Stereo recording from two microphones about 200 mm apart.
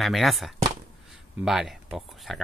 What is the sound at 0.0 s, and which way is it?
Speech, centre (ahead or behind).